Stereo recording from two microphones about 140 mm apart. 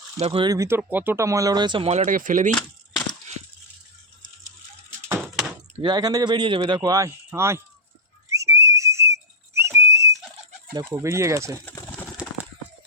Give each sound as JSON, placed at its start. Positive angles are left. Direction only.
{"t": 0.2, "sound": "speech", "side_deg": -45}
{"t": 0.4, "sound": "speech", "side_deg": -25}
{"t": 0.8, "sound": "speech", "side_deg": -15}
{"t": 1.9, "sound": "speech", "side_deg": -50}
{"t": 2.1, "sound": "speech", "side_deg": -70}
{"t": 2.6, "sound": "a sound", "side_deg": 5}
{"t": 4.9, "sound": "a sound", "side_deg": -20}
{"t": 5.8, "sound": "a man's voice", "side_deg": -30}
{"t": 8.3, "sound": "whistle", "side_deg": -20}
{"t": 10.8, "sound": "speech", "side_deg": -20}